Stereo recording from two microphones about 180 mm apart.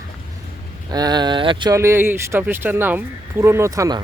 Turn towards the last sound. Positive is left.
turn(degrees=-20)  # may be behind; listen again after turning